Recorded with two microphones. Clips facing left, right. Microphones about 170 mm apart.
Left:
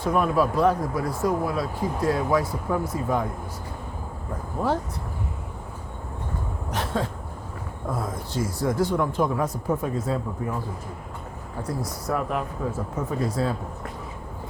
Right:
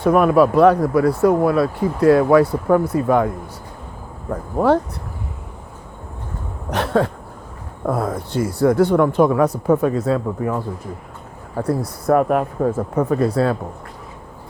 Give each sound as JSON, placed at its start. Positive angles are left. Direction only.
{"t": 0.0, "sound": "speech", "side_deg": -65}
{"t": 4.3, "sound": "speech", "side_deg": -70}
{"t": 6.7, "sound": "a sound", "side_deg": -70}
{"t": 7.9, "sound": "speech", "side_deg": -65}
{"t": 11.5, "sound": "speech", "side_deg": -60}